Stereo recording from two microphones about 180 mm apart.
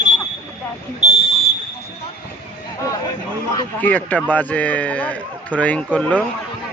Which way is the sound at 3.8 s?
10° left (ahead or behind).